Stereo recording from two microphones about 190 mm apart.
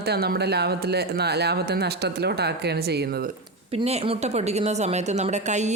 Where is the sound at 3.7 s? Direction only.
30° right (ahead or behind).